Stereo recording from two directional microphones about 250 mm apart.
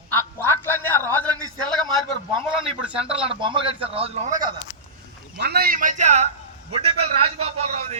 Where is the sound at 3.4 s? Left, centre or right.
Right.